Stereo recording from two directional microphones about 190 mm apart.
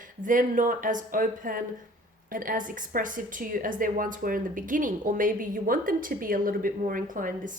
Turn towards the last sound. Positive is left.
turn(degrees=-45)  # may be behind; listen again after turning